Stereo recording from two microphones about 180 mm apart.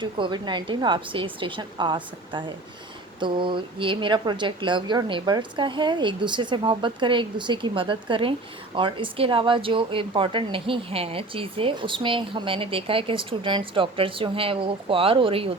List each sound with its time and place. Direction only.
0.0 s a woman's voice: 25° right (ahead or behind)